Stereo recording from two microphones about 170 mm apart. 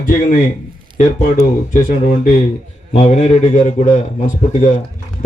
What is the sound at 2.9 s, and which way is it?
Speech, 40° left (ahead or behind).